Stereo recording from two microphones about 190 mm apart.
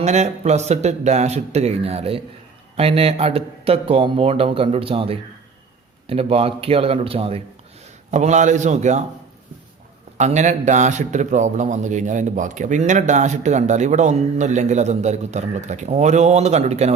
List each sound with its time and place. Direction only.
0.0 s a man's voice: 35° right (ahead or behind)
10.2 s a man's voice: 40° right (ahead or behind)